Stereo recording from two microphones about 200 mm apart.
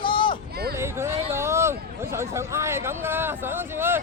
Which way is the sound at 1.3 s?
15° right (ahead or behind).